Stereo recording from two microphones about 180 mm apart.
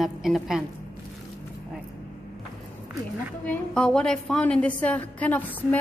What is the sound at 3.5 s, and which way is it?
A woman's voice, 5° left (ahead or behind).